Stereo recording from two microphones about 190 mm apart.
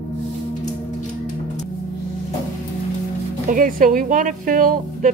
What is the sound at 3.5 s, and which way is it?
A woman's voice, 45° right (ahead or behind).